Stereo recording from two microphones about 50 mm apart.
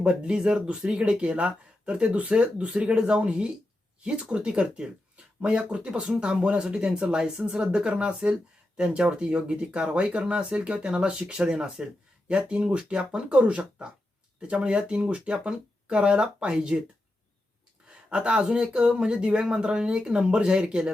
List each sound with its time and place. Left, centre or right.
0.0 s speech: centre
17.8 s speech: right